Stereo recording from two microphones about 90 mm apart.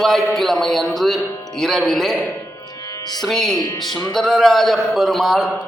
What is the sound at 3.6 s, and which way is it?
Speech, 50° left (ahead or behind).